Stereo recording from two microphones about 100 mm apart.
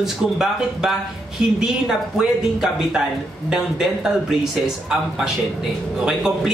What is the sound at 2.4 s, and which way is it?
Speech, 5° right (ahead or behind).